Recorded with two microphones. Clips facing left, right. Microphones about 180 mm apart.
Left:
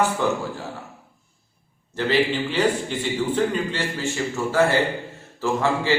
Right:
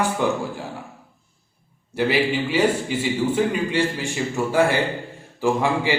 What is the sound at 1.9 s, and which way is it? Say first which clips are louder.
A man's voice: right 1 dB; 10° right (ahead or behind).